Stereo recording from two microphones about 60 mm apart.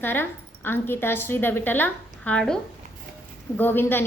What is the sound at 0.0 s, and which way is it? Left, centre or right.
A woman's voice, left.